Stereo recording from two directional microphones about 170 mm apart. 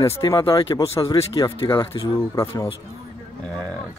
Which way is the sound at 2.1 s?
15° left (ahead or behind).